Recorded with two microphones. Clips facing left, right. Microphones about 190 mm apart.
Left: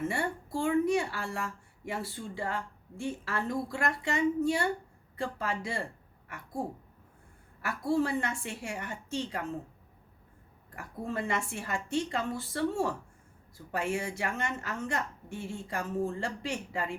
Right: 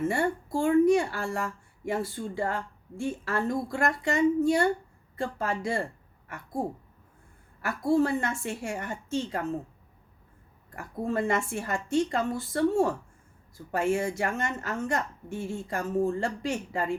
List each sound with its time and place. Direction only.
0.1 s a woman's voice: 45° right (ahead or behind)
7.6 s a woman's voice: 45° right (ahead or behind)
10.8 s a woman's voice: 45° right (ahead or behind)